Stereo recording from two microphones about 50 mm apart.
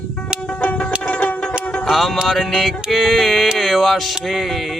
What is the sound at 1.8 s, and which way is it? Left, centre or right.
Speech, centre.